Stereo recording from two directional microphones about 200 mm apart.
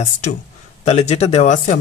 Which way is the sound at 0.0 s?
35° left (ahead or behind).